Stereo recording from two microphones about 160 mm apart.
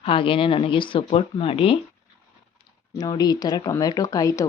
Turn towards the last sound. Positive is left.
turn(degrees=20)  # may be behind; listen again after turning